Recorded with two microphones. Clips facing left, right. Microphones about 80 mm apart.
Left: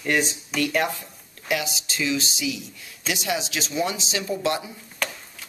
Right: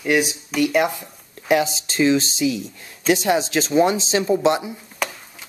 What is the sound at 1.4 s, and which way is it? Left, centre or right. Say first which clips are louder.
Speech: right 8 dB; right.